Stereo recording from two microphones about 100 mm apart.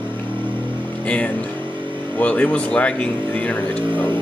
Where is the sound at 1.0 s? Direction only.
15° left (ahead or behind).